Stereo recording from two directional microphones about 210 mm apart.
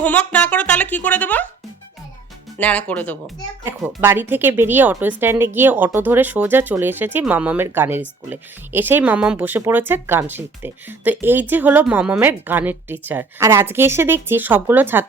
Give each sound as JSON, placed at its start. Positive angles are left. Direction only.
{"t": 0.0, "sound": "speech", "side_deg": 5}
{"t": 2.6, "sound": "speech", "side_deg": 5}
{"t": 3.6, "sound": "speech", "side_deg": -10}